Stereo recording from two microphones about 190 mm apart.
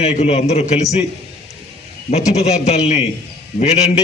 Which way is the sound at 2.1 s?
35° left (ahead or behind).